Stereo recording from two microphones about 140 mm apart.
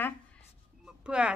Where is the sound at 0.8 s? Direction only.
5° right (ahead or behind).